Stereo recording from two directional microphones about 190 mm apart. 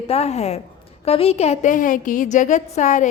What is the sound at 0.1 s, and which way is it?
A woman's voice, 35° left (ahead or behind).